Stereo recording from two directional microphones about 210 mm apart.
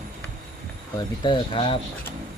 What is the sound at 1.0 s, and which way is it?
Speech, 20° left (ahead or behind).